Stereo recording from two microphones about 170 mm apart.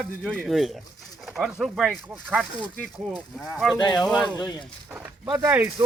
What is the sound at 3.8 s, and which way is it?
Speech, 25° left (ahead or behind).